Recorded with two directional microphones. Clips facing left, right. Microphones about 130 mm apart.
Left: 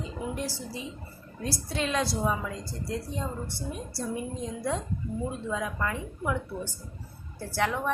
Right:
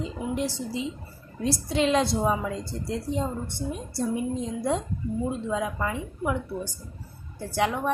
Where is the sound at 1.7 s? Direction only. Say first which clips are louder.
Right 6 dB; 25° right (ahead or behind).